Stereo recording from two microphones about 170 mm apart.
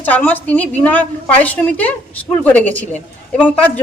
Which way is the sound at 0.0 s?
10° left (ahead or behind).